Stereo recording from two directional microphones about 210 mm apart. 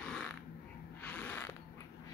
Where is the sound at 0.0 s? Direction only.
5° left (ahead or behind).